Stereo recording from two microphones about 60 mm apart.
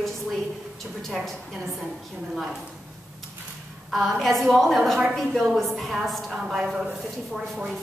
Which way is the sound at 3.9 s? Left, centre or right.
Centre.